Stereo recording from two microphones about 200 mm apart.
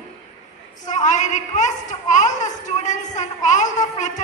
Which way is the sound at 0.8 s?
40° left (ahead or behind).